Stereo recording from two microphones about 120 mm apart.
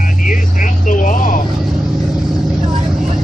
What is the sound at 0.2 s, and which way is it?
Vehicle, 90° left.